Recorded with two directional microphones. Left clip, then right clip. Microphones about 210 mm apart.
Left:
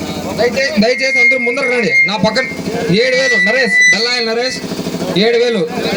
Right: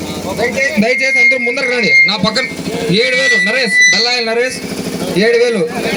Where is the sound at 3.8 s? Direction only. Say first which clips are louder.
Even; 50° left (ahead or behind).